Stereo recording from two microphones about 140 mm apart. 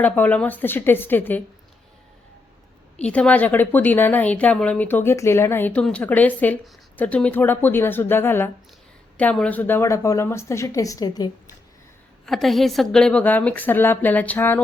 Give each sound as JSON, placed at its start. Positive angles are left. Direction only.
{"t": 0.0, "sound": "a woman's voice", "side_deg": 10}
{"t": 3.0, "sound": "a woman's voice", "side_deg": 10}
{"t": 12.2, "sound": "a woman's voice", "side_deg": 0}